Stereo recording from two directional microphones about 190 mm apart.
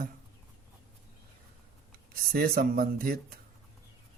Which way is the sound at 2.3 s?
55° right (ahead or behind).